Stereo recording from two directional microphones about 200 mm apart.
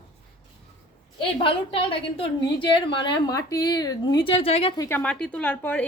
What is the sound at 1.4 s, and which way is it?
A woman's voice, 25° left (ahead or behind).